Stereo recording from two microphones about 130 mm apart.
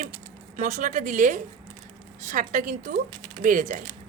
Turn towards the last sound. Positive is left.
turn(degrees=-70)  # may be behind; listen again after turning